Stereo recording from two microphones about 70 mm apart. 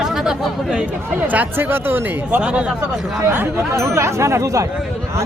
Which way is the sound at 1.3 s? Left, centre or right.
Right.